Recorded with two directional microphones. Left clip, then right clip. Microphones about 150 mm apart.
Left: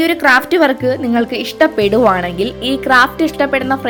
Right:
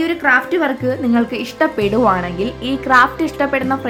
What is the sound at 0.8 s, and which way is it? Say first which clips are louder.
A woman's voice: left 3 dB; 30° left (ahead or behind).